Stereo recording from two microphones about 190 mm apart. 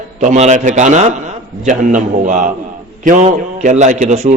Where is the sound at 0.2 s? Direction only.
40° right (ahead or behind).